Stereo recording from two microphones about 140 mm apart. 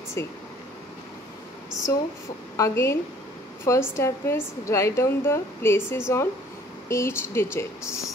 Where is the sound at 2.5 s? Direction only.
20° left (ahead or behind).